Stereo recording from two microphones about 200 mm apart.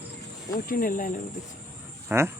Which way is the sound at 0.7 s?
45° left (ahead or behind).